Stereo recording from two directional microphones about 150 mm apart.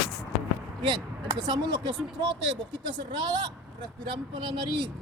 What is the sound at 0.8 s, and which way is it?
Speech, 30° right (ahead or behind).